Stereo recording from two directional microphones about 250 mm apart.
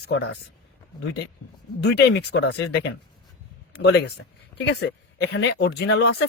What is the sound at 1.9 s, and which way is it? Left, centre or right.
Speech, left.